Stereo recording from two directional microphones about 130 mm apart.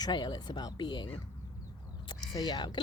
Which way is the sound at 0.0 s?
35° left (ahead or behind).